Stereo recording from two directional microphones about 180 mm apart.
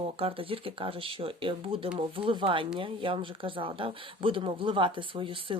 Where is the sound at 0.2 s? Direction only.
30° right (ahead or behind).